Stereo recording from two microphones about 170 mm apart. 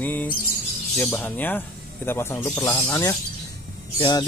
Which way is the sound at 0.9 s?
10° left (ahead or behind).